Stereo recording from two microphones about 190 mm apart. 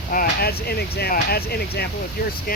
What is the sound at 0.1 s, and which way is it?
Speech, 50° left (ahead or behind).